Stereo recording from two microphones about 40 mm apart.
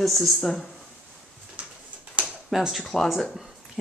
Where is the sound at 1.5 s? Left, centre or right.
Right.